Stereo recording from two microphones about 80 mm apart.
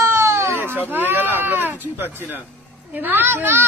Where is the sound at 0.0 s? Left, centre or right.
Right.